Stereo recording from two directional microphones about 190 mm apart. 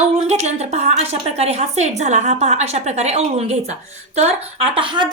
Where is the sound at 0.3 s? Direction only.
35° right (ahead or behind).